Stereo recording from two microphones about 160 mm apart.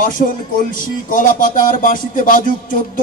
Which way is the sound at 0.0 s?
60° left (ahead or behind).